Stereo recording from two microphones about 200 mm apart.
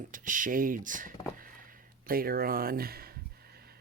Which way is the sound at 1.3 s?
45° right (ahead or behind).